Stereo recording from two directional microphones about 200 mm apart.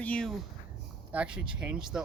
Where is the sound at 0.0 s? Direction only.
5° left (ahead or behind).